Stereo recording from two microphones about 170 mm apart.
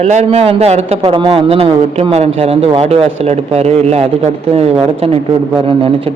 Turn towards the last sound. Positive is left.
turn(degrees=-35)  # may be behind; listen again after turning